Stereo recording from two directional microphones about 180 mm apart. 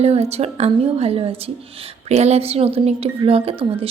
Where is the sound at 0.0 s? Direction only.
35° right (ahead or behind).